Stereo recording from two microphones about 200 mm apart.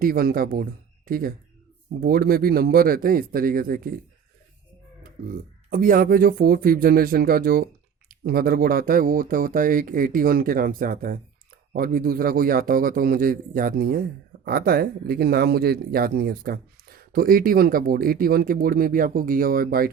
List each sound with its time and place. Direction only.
0.0 s speech: 45° right (ahead or behind)
5.3 s speech: 45° right (ahead or behind)